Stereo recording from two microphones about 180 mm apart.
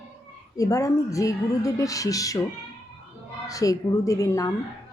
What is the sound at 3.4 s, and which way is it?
A woman's voice, 20° left (ahead or behind).